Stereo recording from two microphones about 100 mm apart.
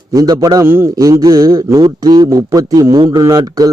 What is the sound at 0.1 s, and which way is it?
Speech, 35° right (ahead or behind).